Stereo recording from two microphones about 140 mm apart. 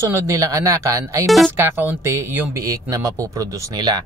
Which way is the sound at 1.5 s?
15° right (ahead or behind).